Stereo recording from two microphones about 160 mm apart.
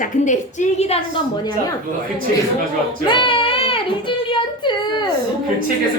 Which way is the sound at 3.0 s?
30° left (ahead or behind).